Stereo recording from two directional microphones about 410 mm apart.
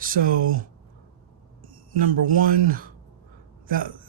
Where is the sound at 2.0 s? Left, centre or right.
Centre.